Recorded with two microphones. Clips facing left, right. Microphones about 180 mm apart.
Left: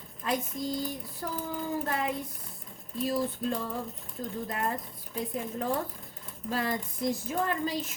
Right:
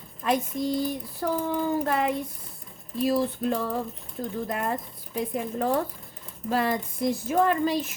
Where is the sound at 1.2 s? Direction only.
75° right (ahead or behind).